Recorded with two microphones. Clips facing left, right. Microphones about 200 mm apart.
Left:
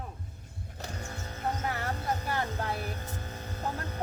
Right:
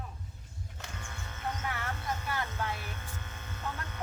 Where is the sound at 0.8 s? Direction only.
35° left (ahead or behind).